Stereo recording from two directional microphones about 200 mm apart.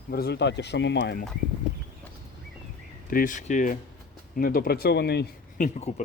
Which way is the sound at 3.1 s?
45° left (ahead or behind).